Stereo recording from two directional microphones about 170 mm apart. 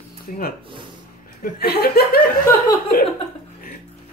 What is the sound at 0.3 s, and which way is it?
Speech, 50° left (ahead or behind).